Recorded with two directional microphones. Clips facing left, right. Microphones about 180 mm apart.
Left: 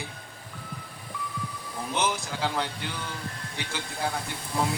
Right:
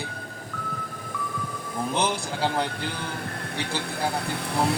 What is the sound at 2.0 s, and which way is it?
Music, 30° right (ahead or behind).